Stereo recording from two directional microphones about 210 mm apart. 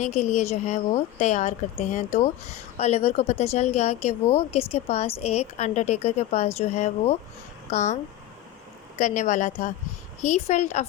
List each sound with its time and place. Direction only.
0.0 s a woman's voice: 35° left (ahead or behind)
9.0 s a woman's voice: 35° left (ahead or behind)